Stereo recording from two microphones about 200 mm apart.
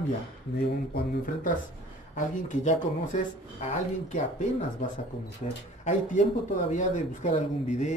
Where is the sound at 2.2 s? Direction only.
40° left (ahead or behind).